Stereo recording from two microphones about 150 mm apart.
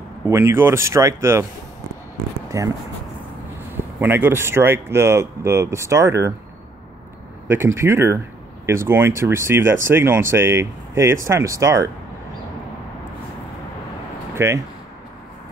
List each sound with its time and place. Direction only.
0.2 s speech: 20° right (ahead or behind)
2.5 s speech: 20° right (ahead or behind)
3.7 s speech: 15° right (ahead or behind)
7.4 s speech: 15° right (ahead or behind)
14.3 s a sound: 20° right (ahead or behind)